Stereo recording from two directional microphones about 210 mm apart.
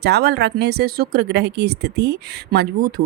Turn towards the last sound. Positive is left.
turn(degrees=-45)  # may be behind; listen again after turning